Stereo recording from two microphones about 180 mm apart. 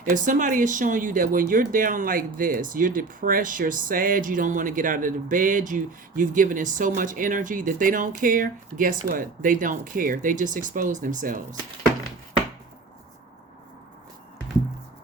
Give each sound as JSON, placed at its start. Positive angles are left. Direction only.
{"t": 0.0, "sound": "speech", "side_deg": -45}